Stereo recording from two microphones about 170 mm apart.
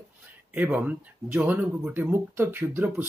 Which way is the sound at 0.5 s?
10° right (ahead or behind).